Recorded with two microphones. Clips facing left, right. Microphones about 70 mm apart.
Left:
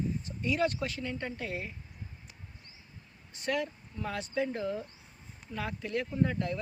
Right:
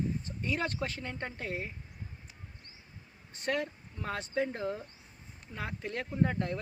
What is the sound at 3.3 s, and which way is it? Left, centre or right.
Speech, right.